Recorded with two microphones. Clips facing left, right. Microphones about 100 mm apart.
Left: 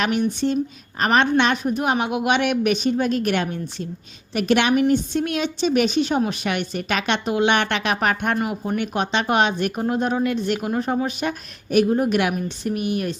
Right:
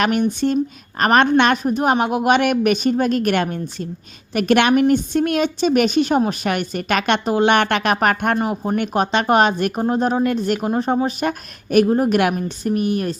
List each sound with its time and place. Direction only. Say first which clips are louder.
0.0 s a woman's voice: right 3 dB; 55° right (ahead or behind)
1.6 s a woman's voice: right 4 dB; 40° right (ahead or behind)
7.3 s a woman's voice: right 3 dB; 40° right (ahead or behind)
8.4 s a woman's voice: right 3 dB; 35° right (ahead or behind)
9.8 s speech: right 4 dB; 35° right (ahead or behind)
10.2 s a woman's voice: right 3 dB; 45° right (ahead or behind)
10.6 s speech: right 4 dB; 35° right (ahead or behind)